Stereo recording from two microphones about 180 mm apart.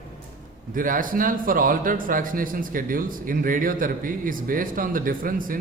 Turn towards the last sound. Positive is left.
turn(degrees=-50)  # may be behind; listen again after turning